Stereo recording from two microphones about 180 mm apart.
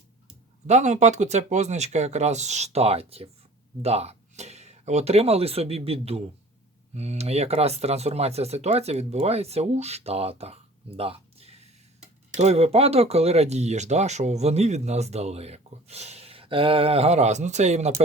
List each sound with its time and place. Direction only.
0.7 s speech: 40° right (ahead or behind)